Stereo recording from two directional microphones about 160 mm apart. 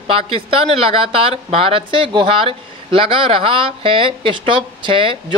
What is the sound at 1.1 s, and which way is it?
A woman's voice, 35° right (ahead or behind).